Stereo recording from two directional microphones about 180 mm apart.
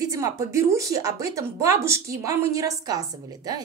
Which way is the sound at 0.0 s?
15° right (ahead or behind).